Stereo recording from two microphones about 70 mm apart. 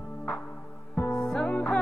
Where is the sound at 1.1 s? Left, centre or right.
Centre.